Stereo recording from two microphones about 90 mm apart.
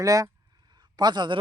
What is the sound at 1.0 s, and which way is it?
Speech, 55° right (ahead or behind).